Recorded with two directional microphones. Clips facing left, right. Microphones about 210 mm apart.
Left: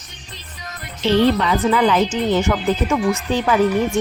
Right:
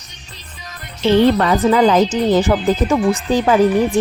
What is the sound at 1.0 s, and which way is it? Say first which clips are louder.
A woman's voice: right 3 dB; 50° right (ahead or behind).